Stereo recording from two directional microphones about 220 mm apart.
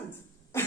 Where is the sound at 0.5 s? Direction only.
10° left (ahead or behind).